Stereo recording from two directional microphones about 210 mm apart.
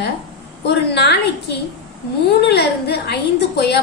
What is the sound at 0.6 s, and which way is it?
A woman's voice, 55° left (ahead or behind).